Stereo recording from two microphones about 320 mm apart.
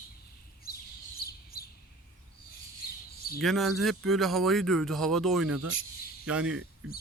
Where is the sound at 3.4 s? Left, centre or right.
Centre.